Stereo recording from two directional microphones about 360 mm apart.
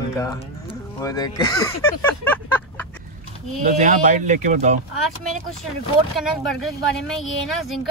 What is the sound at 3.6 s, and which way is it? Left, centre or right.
Speech, right.